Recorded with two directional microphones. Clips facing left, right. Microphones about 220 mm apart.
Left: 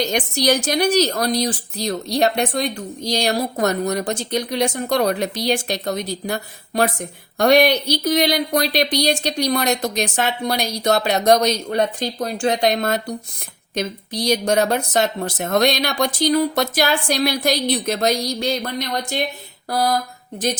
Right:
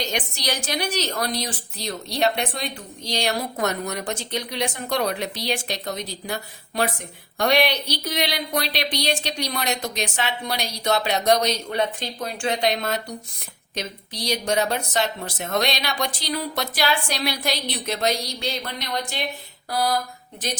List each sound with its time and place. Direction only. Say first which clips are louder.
0.0 s a woman's voice: left 8 dB; 45° left (ahead or behind)